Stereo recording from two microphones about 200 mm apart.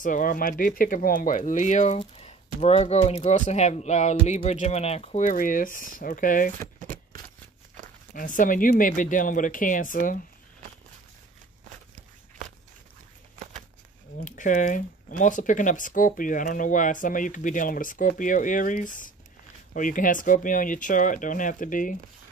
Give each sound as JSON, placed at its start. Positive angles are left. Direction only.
{"t": 0.0, "sound": "speech", "side_deg": 40}
{"t": 6.8, "sound": "a sound", "side_deg": -40}
{"t": 8.1, "sound": "speech", "side_deg": 40}
{"t": 11.9, "sound": "walk", "side_deg": -40}
{"t": 14.2, "sound": "speech", "side_deg": 40}